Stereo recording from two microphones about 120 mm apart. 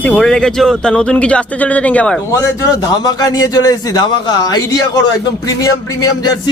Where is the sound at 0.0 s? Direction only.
10° left (ahead or behind).